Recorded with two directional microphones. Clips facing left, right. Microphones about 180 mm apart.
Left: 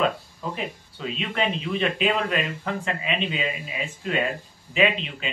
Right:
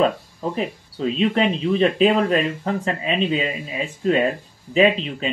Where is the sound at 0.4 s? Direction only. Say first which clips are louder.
Right 7 dB; 35° right (ahead or behind).